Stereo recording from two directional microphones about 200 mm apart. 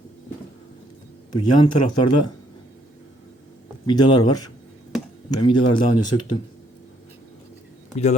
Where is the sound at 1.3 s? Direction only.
20° left (ahead or behind).